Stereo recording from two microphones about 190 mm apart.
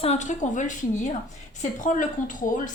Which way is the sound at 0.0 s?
35° left (ahead or behind).